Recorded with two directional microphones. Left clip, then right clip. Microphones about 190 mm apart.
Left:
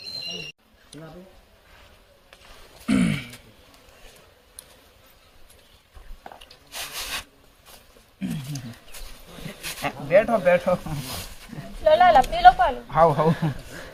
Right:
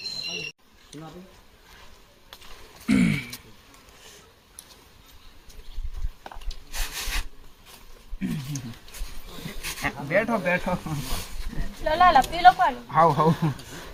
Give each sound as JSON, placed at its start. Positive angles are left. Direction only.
{"t": 2.8, "sound": "throat clearing", "side_deg": 0}
{"t": 6.7, "sound": "wood", "side_deg": 0}
{"t": 8.2, "sound": "wild animals", "side_deg": 0}
{"t": 9.6, "sound": "speech", "side_deg": 5}
{"t": 12.9, "sound": "speech", "side_deg": -5}